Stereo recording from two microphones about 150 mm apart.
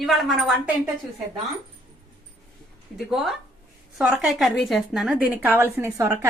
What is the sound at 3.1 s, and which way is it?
A woman's voice, centre (ahead or behind).